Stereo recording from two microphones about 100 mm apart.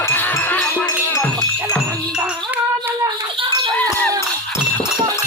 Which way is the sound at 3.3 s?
55° right (ahead or behind).